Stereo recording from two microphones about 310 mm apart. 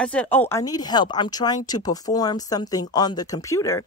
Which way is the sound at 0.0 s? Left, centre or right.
Centre.